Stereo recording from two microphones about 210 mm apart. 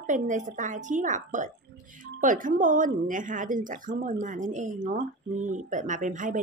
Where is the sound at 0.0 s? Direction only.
35° right (ahead or behind).